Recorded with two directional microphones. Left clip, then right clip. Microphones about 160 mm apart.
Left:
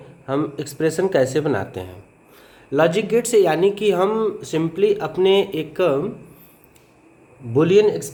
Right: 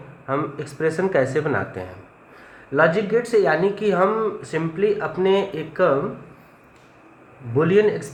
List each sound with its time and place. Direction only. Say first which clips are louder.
0.3 s speech: left 1 dB; 40° left (ahead or behind)
2.7 s speech: left 1 dB; 60° left (ahead or behind)
7.8 s speech: left 1 dB; 45° left (ahead or behind)